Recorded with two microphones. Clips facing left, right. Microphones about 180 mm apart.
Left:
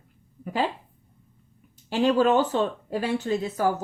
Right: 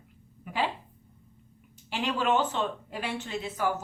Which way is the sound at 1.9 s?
40° left (ahead or behind).